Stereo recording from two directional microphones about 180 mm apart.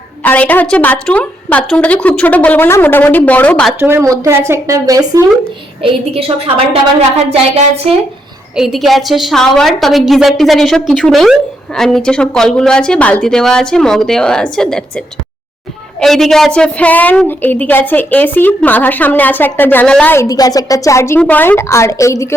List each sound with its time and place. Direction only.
0.2 s a woman's voice: 10° left (ahead or behind)
3.8 s speech: 15° right (ahead or behind)
5.8 s a woman's voice: 30° right (ahead or behind)
8.5 s a woman's voice: centre (ahead or behind); by 22.3 s 15° left (ahead or behind)